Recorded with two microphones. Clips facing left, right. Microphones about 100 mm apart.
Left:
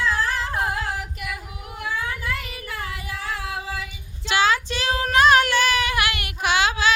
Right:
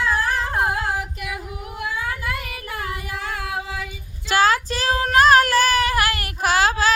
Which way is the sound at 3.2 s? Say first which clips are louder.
Right 1 dB; 50° right (ahead or behind).